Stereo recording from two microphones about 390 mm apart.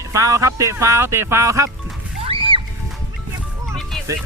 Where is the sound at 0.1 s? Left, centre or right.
Centre.